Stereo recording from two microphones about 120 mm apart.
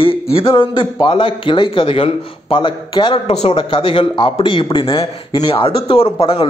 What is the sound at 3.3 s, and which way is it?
A man's voice, 60° left (ahead or behind).